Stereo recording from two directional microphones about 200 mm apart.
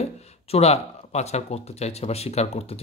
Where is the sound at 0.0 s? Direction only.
30° left (ahead or behind).